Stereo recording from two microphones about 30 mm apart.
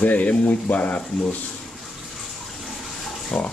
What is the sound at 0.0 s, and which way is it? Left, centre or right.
Speech, left.